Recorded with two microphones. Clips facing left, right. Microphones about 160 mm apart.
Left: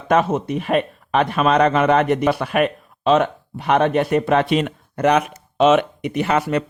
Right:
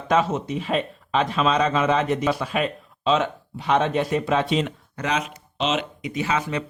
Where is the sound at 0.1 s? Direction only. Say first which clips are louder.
Left 4 dB; 55° left (ahead or behind).